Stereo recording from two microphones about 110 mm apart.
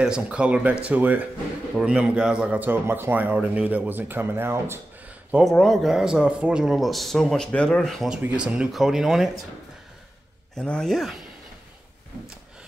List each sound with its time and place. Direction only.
0.0 s speech: 10° right (ahead or behind)
5.4 s speech: 5° left (ahead or behind)
10.5 s speech: 5° left (ahead or behind)